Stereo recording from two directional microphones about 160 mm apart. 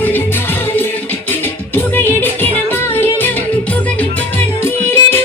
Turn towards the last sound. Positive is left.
turn(degrees=15)  # may be behind; listen again after turning